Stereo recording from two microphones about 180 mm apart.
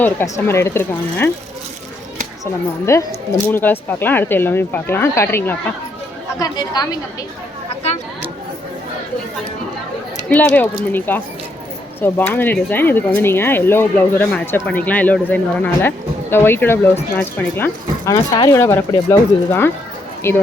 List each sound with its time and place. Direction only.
0.0 s speech: 10° left (ahead or behind)
2.4 s a woman's voice: 15° left (ahead or behind)
10.2 s speech: 10° left (ahead or behind)